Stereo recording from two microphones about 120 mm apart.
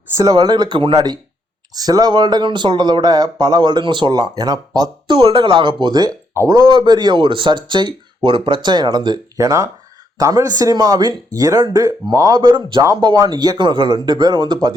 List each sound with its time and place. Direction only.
0.2 s speech: 30° right (ahead or behind)
5.1 s a man's voice: 50° right (ahead or behind)